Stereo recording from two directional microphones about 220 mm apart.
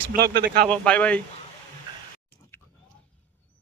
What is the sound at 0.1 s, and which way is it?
Speech, 45° right (ahead or behind).